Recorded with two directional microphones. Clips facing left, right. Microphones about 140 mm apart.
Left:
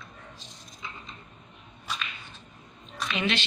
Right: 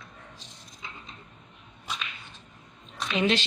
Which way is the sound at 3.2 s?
35° right (ahead or behind).